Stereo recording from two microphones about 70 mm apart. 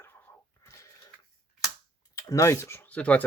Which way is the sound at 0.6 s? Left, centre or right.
Left.